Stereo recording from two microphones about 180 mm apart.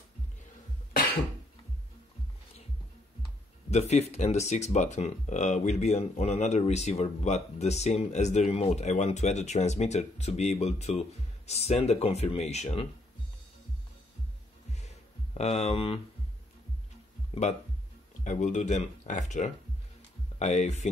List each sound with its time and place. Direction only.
3.7 s speech: 35° left (ahead or behind)
14.8 s a sound: 40° left (ahead or behind)
17.3 s speech: 40° left (ahead or behind)